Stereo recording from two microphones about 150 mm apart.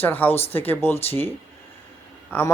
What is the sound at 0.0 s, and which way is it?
Speech, 10° left (ahead or behind).